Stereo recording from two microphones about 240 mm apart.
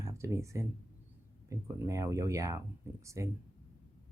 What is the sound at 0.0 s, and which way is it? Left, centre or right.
Speech, centre.